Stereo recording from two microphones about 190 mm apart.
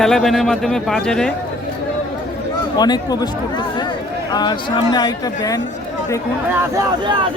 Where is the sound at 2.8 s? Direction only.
20° left (ahead or behind).